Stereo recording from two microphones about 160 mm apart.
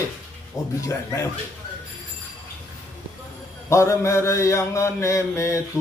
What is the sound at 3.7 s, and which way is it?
A man's voice, 20° left (ahead or behind).